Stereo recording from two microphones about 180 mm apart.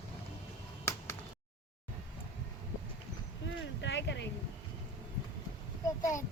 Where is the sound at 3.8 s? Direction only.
80° left.